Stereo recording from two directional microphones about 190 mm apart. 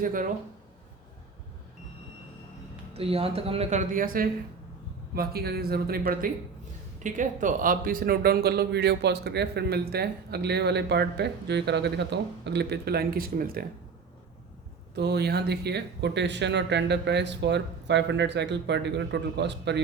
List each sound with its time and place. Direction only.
0.0 s speech: 45° right (ahead or behind)
2.9 s a man's voice: 30° right (ahead or behind); by 13.7 s 50° right (ahead or behind)
14.9 s a man's voice: 60° right (ahead or behind)